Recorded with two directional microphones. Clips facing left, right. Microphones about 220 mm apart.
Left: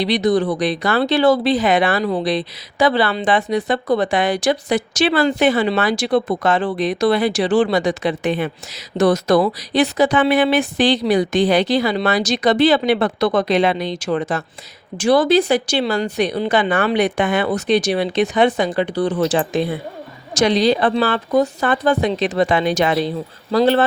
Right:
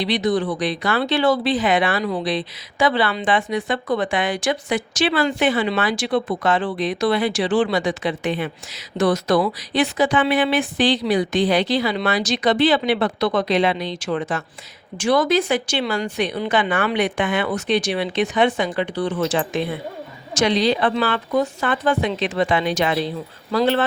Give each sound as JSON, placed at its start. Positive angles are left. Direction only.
{"t": 0.0, "sound": "speech", "side_deg": 40}